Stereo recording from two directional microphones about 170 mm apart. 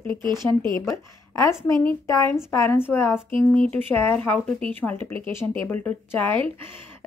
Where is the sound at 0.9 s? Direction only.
20° left (ahead or behind).